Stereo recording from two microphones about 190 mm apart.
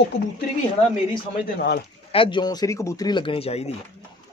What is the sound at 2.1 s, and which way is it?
Speech, 25° left (ahead or behind).